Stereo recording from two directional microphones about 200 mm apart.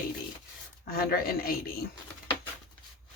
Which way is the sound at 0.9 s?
45° left (ahead or behind).